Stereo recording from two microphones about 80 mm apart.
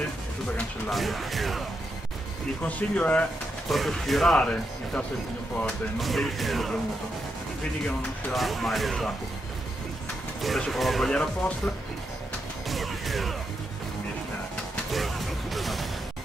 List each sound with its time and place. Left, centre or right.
0.8 s speech: centre
2.6 s speech: centre
3.6 s speech: centre
5.9 s speech: centre
7.8 s speech: centre
10.4 s speech: centre
12.6 s music: centre
14.9 s music: centre